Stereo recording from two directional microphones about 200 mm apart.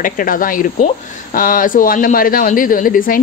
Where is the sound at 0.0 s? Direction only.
45° left (ahead or behind).